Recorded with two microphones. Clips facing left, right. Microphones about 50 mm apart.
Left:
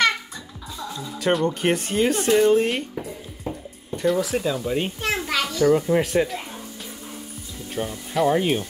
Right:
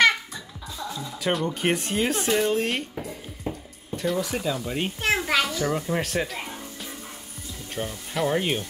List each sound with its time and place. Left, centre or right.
0.9 s speech: centre
5.0 s a child's voice: centre
7.7 s speech: centre